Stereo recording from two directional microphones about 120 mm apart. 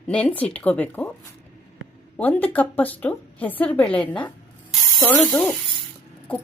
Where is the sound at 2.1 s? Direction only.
10° left (ahead or behind).